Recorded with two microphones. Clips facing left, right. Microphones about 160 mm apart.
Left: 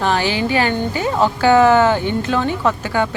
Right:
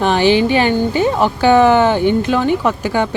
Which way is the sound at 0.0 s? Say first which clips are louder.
Right 6 dB; 20° right (ahead or behind).